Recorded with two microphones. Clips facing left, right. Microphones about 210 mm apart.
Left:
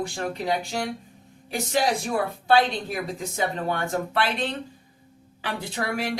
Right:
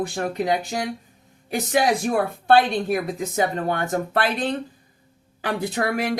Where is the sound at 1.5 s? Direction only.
55° right (ahead or behind).